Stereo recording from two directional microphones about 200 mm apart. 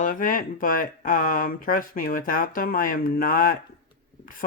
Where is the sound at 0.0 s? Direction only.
40° left (ahead or behind).